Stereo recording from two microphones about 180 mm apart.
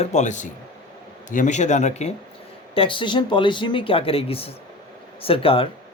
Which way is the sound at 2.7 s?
30° left (ahead or behind).